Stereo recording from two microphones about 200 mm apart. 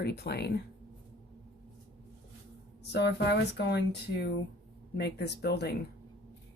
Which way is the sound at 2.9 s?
60° left (ahead or behind).